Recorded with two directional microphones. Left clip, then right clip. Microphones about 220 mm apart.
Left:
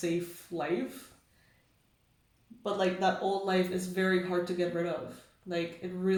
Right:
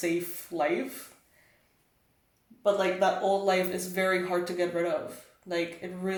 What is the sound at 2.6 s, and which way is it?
Speech, 30° right (ahead or behind).